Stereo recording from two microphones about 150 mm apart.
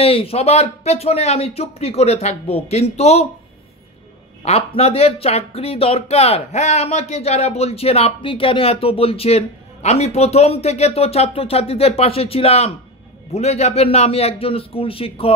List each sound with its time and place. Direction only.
0.0 s speech: 40° left (ahead or behind)
4.5 s a man's voice: 40° left (ahead or behind)